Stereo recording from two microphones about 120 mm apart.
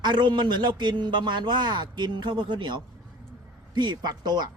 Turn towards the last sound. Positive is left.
turn(degrees=-35)  # may be behind; listen again after turning